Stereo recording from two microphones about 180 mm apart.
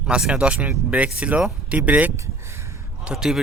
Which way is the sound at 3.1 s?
5° right (ahead or behind).